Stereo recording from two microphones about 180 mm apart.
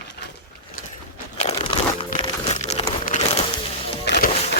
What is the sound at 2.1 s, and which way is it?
Music, 30° left (ahead or behind).